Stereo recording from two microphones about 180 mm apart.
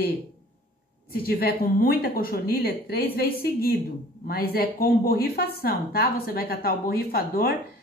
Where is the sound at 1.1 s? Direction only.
55° left (ahead or behind).